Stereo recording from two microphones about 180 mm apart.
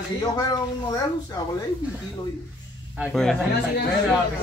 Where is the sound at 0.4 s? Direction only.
20° left (ahead or behind).